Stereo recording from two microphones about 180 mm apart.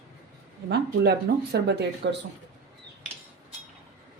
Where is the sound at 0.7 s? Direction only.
65° right (ahead or behind).